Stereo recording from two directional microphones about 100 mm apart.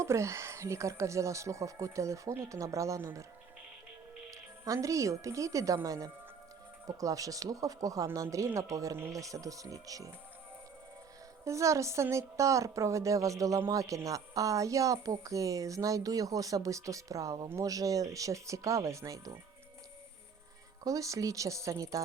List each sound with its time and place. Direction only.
0.0 s speech: 30° right (ahead or behind)
4.3 s speech: 35° right (ahead or behind)
11.4 s speech: 30° right (ahead or behind)
20.8 s speech: 35° right (ahead or behind)